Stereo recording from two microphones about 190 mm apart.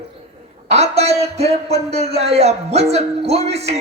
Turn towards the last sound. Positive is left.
turn(degrees=-35)  # may be behind; listen again after turning